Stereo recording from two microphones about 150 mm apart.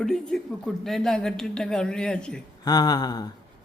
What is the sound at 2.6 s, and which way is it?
Speech, 25° left (ahead or behind).